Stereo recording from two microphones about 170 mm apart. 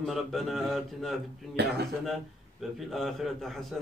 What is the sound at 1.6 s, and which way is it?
Speech, 70° right (ahead or behind).